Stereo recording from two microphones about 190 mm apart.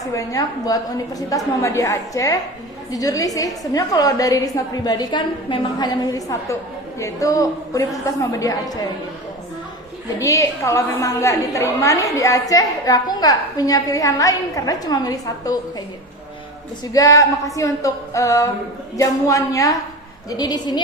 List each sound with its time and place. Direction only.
0.0 s a woman's voice: 15° left (ahead or behind)
10.2 s a woman's voice: 15° left (ahead or behind)
16.9 s a woman's voice: 20° left (ahead or behind)